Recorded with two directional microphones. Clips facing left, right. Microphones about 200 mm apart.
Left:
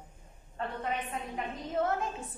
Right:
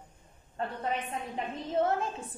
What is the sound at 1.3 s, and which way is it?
Speech, 30° right (ahead or behind).